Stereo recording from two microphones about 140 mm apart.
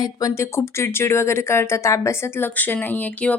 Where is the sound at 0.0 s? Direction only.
25° left (ahead or behind).